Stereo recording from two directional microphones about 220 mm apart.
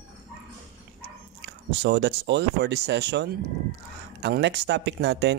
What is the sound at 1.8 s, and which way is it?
Speech, 50° right (ahead or behind).